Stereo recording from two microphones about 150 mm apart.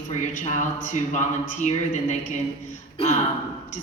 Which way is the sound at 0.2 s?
55° left (ahead or behind).